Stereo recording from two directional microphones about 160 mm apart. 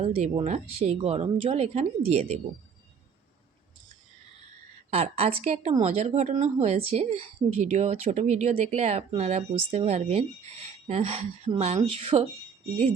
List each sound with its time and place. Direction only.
0.0 s speech: 40° right (ahead or behind)
4.9 s a woman's voice: 40° right (ahead or behind)